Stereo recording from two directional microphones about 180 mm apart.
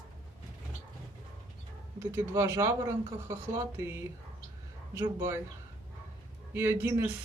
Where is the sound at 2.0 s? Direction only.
15° right (ahead or behind).